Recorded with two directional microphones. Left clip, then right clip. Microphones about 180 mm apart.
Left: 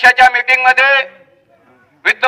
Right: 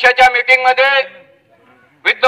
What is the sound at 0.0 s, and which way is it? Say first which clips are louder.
A man's voice: left 1 dB; 15° right (ahead or behind).